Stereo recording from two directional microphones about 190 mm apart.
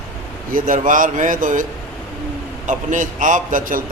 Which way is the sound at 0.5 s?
45° right (ahead or behind).